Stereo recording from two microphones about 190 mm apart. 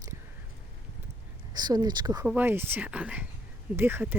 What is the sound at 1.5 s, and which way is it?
Speech, 20° right (ahead or behind).